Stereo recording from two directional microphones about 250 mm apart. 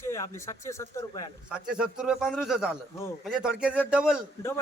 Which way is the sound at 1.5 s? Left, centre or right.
Centre.